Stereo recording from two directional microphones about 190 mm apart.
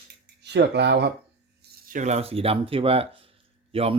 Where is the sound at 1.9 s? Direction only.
40° right (ahead or behind).